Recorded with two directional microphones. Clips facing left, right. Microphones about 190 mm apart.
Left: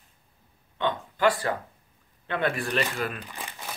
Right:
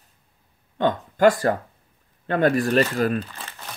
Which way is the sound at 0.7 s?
45° right (ahead or behind).